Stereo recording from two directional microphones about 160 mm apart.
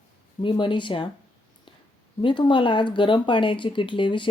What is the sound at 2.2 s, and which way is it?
Speech, 30° left (ahead or behind).